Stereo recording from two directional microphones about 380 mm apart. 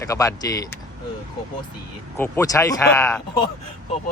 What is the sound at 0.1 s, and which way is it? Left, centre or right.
Speech, centre.